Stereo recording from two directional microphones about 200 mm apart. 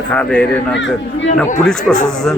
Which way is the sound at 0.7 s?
65° left (ahead or behind).